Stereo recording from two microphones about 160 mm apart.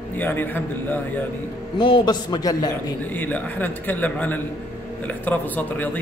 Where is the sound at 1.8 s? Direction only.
30° left (ahead or behind).